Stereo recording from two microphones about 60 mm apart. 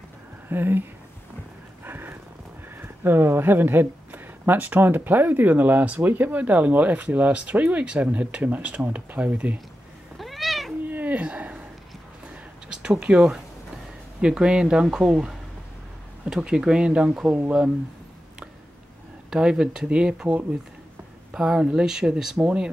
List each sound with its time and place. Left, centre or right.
0.5 s speech: right
1.9 s horse: right
2.8 s speech: right
10.1 s cat: centre
10.9 s a sound: right
11.1 s a sound: centre
12.6 s speech: centre
19.3 s speech: centre
21.3 s speech: centre